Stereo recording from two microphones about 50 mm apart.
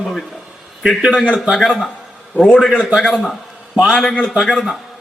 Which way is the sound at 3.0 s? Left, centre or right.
Centre.